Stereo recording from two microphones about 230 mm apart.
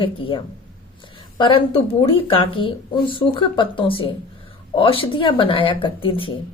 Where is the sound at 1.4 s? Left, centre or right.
Left.